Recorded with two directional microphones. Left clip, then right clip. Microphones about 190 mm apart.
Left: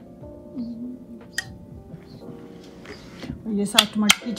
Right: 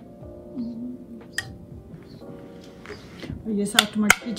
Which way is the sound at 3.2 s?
15° left (ahead or behind).